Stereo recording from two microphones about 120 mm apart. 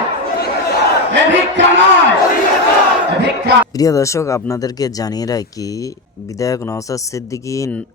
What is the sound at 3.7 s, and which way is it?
Speech, 30° left (ahead or behind).